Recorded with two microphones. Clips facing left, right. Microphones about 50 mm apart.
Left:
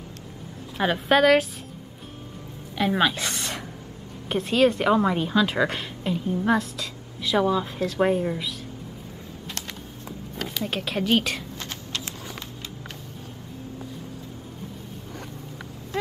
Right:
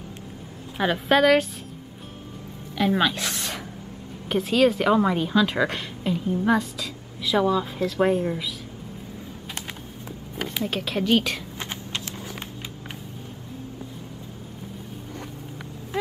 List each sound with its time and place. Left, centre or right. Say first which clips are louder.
0.7 s a woman's voice: even; centre
2.7 s a woman's voice: even; centre
10.6 s a woman's voice: right 1 dB; centre
11.5 s a sound: right 1 dB; right
15.9 s vehicle: right 1 dB; centre